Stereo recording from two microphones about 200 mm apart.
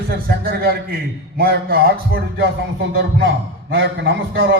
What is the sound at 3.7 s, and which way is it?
Speech, 65° right (ahead or behind).